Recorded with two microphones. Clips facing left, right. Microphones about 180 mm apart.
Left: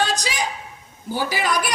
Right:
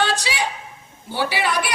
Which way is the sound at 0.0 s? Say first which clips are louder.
Right 1 dB; 40° left (ahead or behind).